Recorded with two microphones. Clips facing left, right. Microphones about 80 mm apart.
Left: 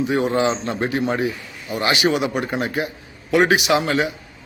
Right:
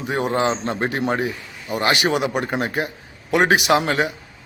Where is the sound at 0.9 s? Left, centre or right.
Right.